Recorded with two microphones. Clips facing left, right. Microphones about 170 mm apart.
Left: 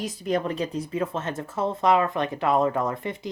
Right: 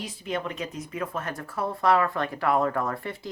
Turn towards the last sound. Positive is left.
turn(degrees=20)  # may be behind; listen again after turning